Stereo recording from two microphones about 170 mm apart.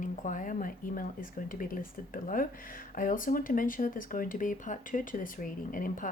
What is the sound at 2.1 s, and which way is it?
Speech, 55° left (ahead or behind).